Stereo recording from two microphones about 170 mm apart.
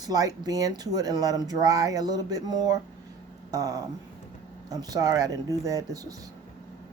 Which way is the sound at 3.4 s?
20° right (ahead or behind).